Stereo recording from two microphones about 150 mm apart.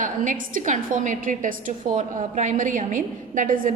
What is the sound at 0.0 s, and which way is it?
A woman's voice, 60° right (ahead or behind).